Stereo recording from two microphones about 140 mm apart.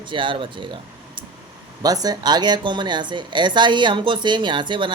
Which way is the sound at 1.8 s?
25° right (ahead or behind).